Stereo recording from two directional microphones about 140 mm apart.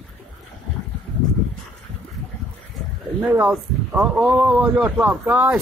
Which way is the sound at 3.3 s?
10° right (ahead or behind).